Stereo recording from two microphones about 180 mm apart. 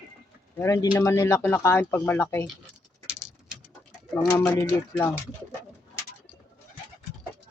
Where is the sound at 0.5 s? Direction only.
15° left (ahead or behind).